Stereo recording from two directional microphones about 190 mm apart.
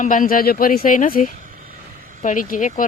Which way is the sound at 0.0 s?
45° left (ahead or behind).